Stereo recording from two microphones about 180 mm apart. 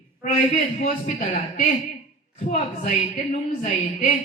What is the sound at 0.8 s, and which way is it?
A woman's voice, 45° left (ahead or behind).